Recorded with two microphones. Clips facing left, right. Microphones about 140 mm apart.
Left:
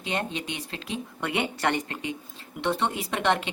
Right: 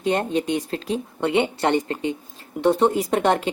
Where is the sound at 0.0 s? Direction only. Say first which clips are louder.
Right 9 dB; 45° right (ahead or behind).